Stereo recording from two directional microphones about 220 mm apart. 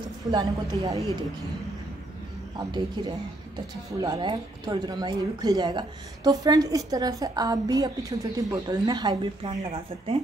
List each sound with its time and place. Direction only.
0.3 s speech: 15° right (ahead or behind)
2.6 s speech: 15° right (ahead or behind)